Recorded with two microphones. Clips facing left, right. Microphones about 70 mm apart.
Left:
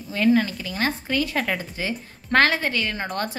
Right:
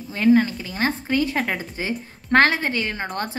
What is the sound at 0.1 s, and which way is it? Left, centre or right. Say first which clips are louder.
A woman's voice: right 3 dB; right.